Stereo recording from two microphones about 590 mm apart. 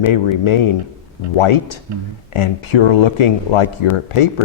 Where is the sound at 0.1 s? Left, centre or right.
Left.